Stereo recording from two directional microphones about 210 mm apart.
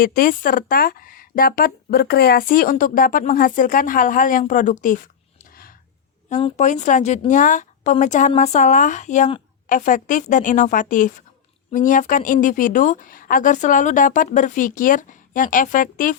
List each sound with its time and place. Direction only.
0.0 s a woman's voice: 45° left (ahead or behind)
6.2 s a woman's voice: 35° left (ahead or behind)